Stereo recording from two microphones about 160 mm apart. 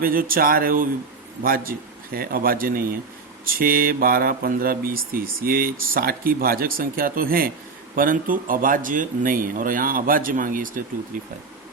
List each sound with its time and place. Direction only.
0.0 s speech: 65° right (ahead or behind)